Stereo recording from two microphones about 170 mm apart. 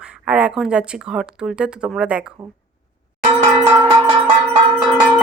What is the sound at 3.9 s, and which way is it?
Cowbell, 25° right (ahead or behind).